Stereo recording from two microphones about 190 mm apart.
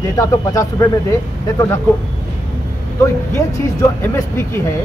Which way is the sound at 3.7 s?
15° left (ahead or behind).